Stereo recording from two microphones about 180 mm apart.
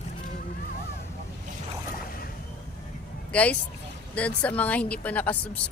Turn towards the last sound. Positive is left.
turn(degrees=10)  # may be behind; listen again after turning